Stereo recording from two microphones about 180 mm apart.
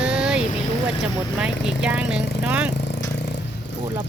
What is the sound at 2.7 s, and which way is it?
Vehicle, 70° left (ahead or behind).